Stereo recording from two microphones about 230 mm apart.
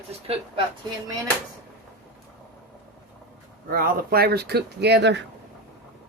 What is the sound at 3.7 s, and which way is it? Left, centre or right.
Speech, right.